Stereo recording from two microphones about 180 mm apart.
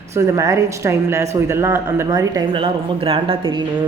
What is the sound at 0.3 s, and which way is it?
Speech, 15° right (ahead or behind).